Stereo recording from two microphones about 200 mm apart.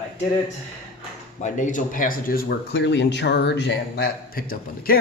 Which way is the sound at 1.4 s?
40° left (ahead or behind).